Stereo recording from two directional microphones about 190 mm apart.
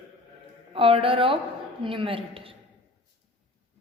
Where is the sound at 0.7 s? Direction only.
30° right (ahead or behind).